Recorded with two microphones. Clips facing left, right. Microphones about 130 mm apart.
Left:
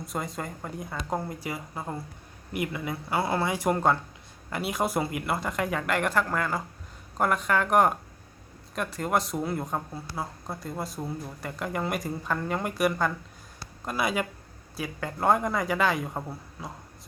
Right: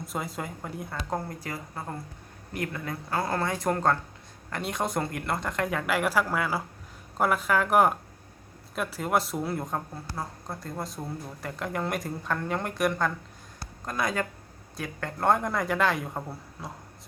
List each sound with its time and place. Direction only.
0.0 s speech: centre (ahead or behind)
13.6 s a sound: 10° left (ahead or behind)
14.8 s speech: 5° left (ahead or behind)